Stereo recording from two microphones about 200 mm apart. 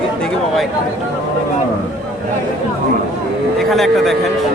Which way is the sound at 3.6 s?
Centre (ahead or behind).